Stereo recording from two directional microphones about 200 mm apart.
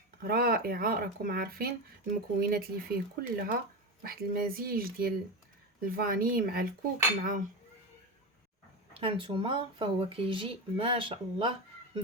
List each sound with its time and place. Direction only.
0.2 s speech: 50° right (ahead or behind)
7.2 s cutlery: 40° right (ahead or behind)
8.9 s speech: 25° right (ahead or behind)